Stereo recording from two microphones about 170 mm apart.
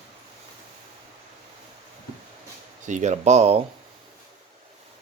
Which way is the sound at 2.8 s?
45° right (ahead or behind).